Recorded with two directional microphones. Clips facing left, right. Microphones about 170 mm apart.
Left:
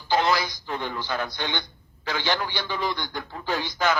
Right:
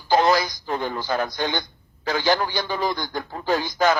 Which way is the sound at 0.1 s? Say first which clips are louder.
Right 4 dB; 40° right (ahead or behind).